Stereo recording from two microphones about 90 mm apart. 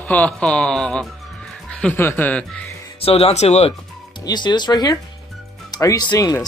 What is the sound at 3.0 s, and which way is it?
Speech, 90° left.